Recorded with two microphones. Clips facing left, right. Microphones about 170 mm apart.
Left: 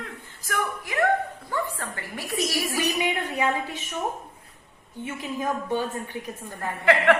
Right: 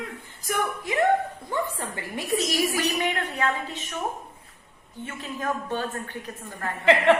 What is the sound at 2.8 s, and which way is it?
A woman's voice, 10° left (ahead or behind).